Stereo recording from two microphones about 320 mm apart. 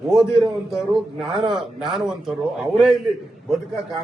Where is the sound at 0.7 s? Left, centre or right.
Centre.